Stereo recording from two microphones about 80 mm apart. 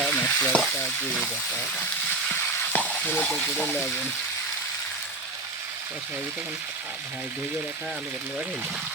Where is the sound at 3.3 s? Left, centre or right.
Centre.